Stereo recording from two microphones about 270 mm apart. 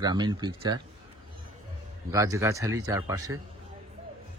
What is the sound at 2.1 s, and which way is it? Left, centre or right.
Speech, centre.